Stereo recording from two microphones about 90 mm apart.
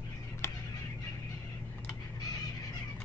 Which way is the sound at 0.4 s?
30° left (ahead or behind).